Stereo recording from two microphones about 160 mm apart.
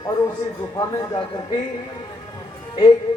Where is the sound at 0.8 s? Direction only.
25° left (ahead or behind).